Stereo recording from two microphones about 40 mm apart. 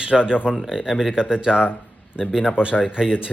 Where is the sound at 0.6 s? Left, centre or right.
Centre.